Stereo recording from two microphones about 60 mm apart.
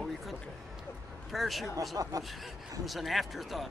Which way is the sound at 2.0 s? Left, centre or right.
Right.